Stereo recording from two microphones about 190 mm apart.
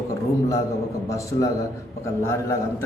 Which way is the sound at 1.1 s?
15° left (ahead or behind).